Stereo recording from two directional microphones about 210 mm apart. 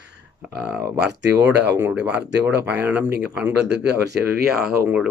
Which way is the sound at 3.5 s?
55° right (ahead or behind).